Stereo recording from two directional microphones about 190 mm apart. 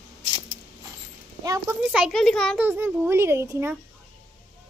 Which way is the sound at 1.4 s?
20° right (ahead or behind).